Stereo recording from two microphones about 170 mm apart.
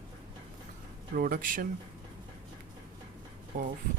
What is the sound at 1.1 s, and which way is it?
Speech, 55° right (ahead or behind).